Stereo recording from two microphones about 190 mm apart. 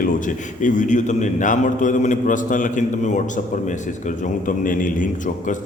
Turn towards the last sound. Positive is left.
turn(degrees=40)  # may be behind; listen again after turning